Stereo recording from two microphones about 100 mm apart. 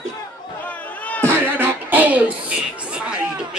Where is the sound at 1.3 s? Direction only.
20° right (ahead or behind).